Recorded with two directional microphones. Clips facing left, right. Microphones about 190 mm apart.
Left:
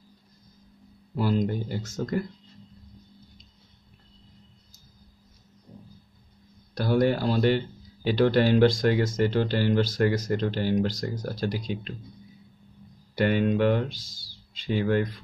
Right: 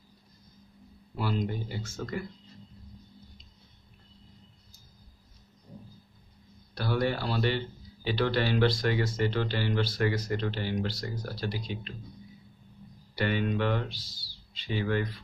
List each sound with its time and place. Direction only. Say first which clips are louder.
1.1 s speech: left 6 dB; 45° left (ahead or behind)
6.7 s a sound: left 6 dB; 45° left (ahead or behind)
8.1 s speech: left 7 dB; 45° left (ahead or behind)
13.1 s speech: left 6 dB; 45° left (ahead or behind)